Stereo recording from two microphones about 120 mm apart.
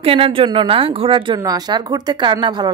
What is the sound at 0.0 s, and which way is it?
Speech, 50° right (ahead or behind).